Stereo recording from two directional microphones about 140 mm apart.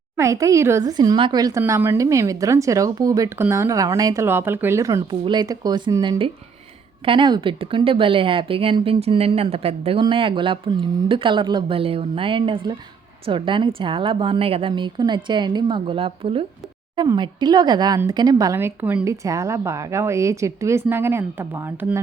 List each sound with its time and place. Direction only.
0.2 s speech: 20° right (ahead or behind)
5.2 s speech: 30° right (ahead or behind); by 22.0 s 15° right (ahead or behind)